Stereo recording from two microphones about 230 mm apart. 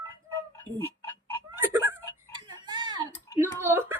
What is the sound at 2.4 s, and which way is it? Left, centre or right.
Tick-tock, centre.